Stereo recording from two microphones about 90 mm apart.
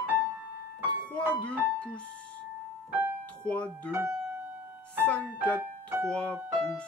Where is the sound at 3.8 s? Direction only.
25° right (ahead or behind).